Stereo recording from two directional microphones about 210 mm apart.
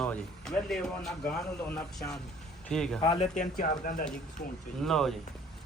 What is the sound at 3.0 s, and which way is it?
Speech, 30° left (ahead or behind).